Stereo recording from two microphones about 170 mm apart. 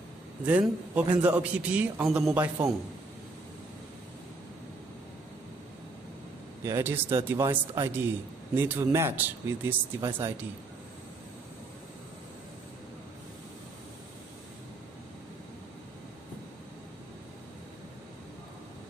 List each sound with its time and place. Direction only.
0.5 s speech: 5° right (ahead or behind)
6.6 s speech: 15° right (ahead or behind)